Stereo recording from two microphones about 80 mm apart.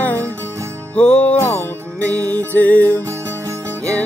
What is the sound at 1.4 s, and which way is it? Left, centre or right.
Music, left.